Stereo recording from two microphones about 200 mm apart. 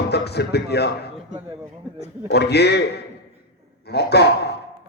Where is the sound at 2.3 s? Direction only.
55° left (ahead or behind).